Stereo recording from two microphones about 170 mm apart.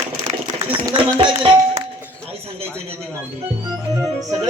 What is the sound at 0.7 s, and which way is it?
Speech, 30° right (ahead or behind).